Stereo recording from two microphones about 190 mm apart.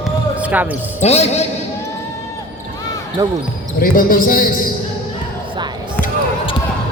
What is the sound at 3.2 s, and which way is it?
Speech, 20° right (ahead or behind).